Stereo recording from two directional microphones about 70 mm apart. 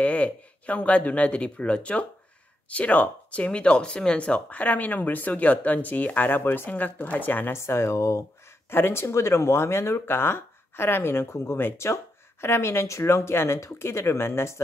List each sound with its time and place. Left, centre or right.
0.0 s speech: centre
7.5 s speech: left